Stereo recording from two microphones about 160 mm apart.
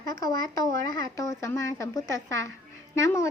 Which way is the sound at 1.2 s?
20° left (ahead or behind).